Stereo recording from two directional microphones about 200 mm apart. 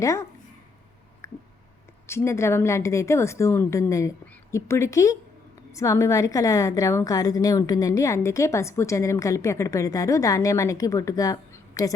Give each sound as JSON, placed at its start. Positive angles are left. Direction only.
{"t": 0.0, "sound": "a woman's voice", "side_deg": 15}
{"t": 1.2, "sound": "a sound", "side_deg": 15}
{"t": 2.0, "sound": "a woman's voice", "side_deg": 15}